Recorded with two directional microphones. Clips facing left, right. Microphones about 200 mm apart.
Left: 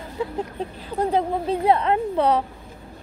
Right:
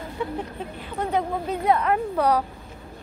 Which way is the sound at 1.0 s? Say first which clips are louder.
Left 3 dB; 30° left (ahead or behind).